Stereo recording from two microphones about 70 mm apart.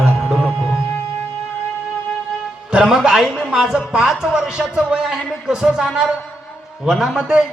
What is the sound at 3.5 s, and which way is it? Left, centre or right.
Speech, centre.